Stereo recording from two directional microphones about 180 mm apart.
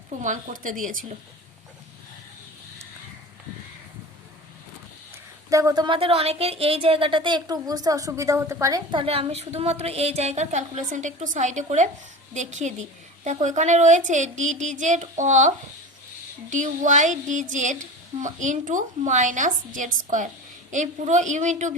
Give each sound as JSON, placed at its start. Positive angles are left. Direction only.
{"t": 0.2, "sound": "a woman's voice", "side_deg": -45}
{"t": 5.5, "sound": "a woman's voice", "side_deg": -20}